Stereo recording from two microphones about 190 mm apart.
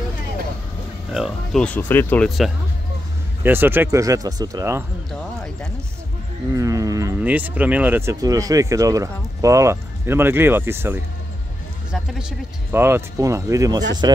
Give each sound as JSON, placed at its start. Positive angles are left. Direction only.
{"t": 1.1, "sound": "speech", "side_deg": 0}
{"t": 3.4, "sound": "speech", "side_deg": -10}
{"t": 6.5, "sound": "speech", "side_deg": -15}